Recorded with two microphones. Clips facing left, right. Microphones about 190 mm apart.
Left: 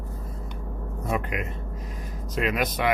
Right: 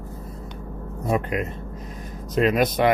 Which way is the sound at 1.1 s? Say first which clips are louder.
Right 5 dB; 35° right (ahead or behind).